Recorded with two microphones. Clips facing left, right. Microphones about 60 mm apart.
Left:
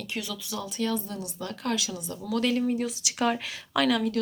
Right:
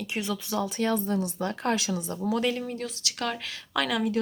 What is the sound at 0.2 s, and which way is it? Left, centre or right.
Speech, right.